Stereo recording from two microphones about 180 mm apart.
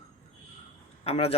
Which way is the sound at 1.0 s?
35° left (ahead or behind).